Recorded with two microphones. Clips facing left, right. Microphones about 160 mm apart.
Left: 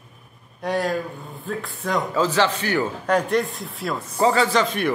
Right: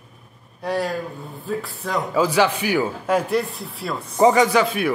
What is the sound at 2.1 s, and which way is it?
A man's voice, 10° right (ahead or behind).